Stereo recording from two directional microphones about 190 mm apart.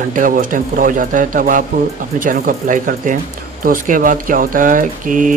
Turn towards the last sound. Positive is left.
turn(degrees=-45)  # may be behind; listen again after turning